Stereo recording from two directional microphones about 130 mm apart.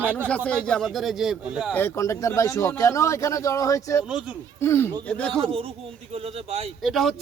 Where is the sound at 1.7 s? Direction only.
20° left (ahead or behind).